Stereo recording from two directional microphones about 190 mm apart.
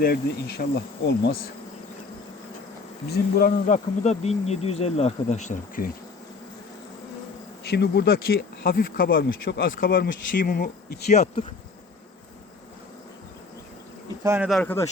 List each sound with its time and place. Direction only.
0.0 s bee: 55° left (ahead or behind)
3.1 s bee: 55° left (ahead or behind)
3.7 s speech: 35° left (ahead or behind)
7.6 s speech: 60° left (ahead or behind)
11.1 s speech: 35° left (ahead or behind)
14.3 s speech: 10° right (ahead or behind)
14.5 s speech: 10° left (ahead or behind)